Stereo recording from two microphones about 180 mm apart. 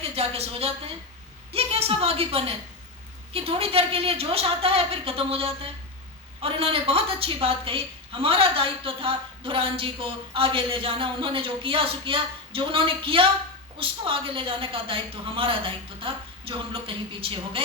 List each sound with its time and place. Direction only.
0.0 s a woman's voice: 35° right (ahead or behind)